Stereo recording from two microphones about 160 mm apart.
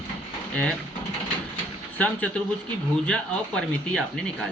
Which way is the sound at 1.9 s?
10° left (ahead or behind).